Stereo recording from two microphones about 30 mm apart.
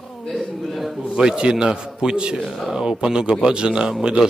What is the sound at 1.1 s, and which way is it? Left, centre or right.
Speech, right.